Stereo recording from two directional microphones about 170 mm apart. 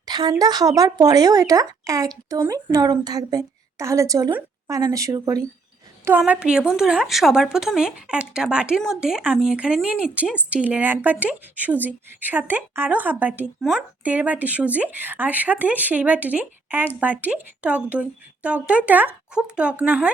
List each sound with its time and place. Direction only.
0.0 s a woman's voice: 25° right (ahead or behind)